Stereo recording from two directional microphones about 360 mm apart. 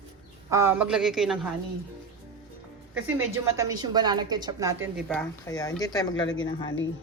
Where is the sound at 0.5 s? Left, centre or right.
Centre.